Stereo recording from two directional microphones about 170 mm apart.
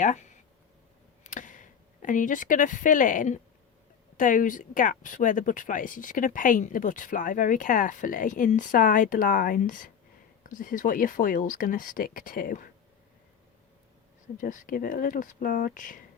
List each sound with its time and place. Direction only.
1.2 s a sound: 50° left (ahead or behind)
4.2 s speech: 50° left (ahead or behind)
14.3 s speech: 50° left (ahead or behind)